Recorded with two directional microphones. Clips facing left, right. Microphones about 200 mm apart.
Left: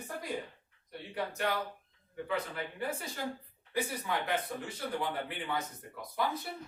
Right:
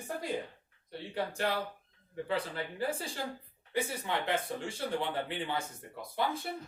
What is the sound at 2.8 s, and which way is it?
A woman's voice, 30° right (ahead or behind).